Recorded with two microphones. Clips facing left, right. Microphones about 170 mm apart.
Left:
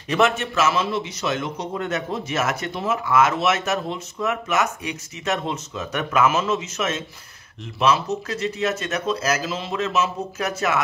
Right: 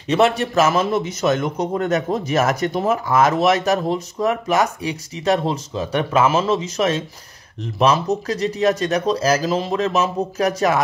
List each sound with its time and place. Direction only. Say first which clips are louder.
0.1 s a man's voice: right 4 dB; 35° right (ahead or behind)